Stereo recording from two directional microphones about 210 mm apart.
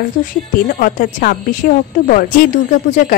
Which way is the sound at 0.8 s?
40° left (ahead or behind).